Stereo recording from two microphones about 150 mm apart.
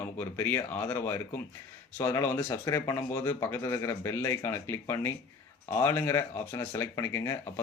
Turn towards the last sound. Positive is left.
turn(degrees=15)  # may be behind; listen again after turning